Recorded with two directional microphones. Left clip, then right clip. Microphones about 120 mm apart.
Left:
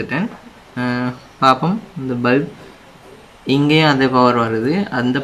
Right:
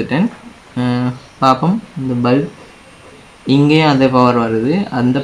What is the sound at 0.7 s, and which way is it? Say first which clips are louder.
Speech: right 2 dB; 15° right (ahead or behind).